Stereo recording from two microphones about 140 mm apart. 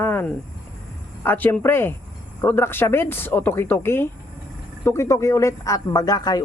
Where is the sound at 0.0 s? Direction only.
15° left (ahead or behind).